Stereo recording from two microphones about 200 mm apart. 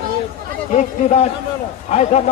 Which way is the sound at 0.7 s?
35° left (ahead or behind).